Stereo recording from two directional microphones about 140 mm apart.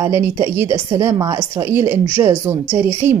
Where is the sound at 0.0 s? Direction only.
20° right (ahead or behind).